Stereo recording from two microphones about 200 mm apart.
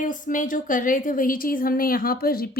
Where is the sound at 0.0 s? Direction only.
40° left (ahead or behind).